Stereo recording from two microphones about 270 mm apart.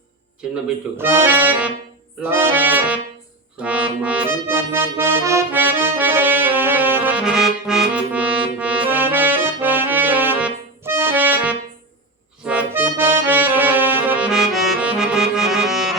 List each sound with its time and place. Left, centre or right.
0.9 s accordion: centre
3.6 s music: centre
12.5 s accordion: centre